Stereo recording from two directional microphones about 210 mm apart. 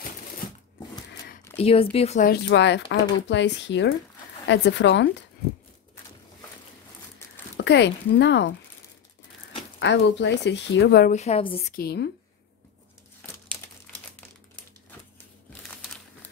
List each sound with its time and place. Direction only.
1.6 s speech: 25° left (ahead or behind)
2.5 s speech: 55° left (ahead or behind)
7.5 s speech: 55° left (ahead or behind)
9.8 s speech: 55° left (ahead or behind)
11.1 s a woman's voice: 30° left (ahead or behind)
11.7 s speech: 50° left (ahead or behind)